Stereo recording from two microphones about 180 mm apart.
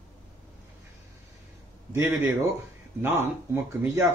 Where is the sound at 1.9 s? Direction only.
15° right (ahead or behind).